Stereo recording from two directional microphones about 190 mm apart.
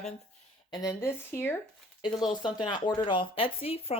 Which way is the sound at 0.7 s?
15° left (ahead or behind).